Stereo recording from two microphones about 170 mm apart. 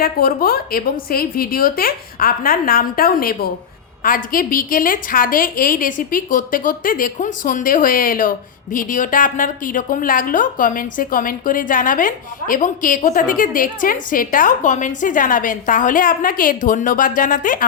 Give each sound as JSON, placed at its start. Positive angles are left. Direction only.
{"t": 0.0, "sound": "a woman's voice", "side_deg": 60}